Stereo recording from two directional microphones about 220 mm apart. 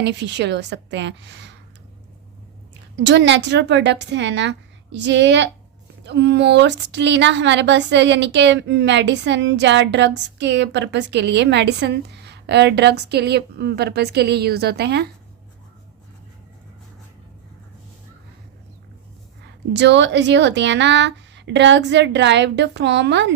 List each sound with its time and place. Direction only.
0.0 s a woman's voice: 50° right (ahead or behind)
2.9 s a woman's voice: 55° right (ahead or behind)
19.7 s a woman's voice: 50° right (ahead or behind)